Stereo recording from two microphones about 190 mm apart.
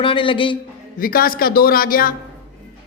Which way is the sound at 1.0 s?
50° left (ahead or behind).